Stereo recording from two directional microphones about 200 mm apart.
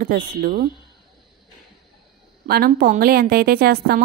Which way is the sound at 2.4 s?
50° right (ahead or behind).